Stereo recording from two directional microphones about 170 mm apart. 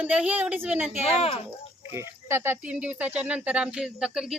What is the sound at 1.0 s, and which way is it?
Speech, 35° left (ahead or behind).